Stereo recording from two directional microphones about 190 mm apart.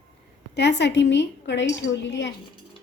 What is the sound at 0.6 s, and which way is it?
A woman's voice, 65° left (ahead or behind).